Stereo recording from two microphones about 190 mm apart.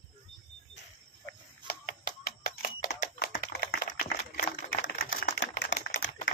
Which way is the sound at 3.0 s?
50° left (ahead or behind).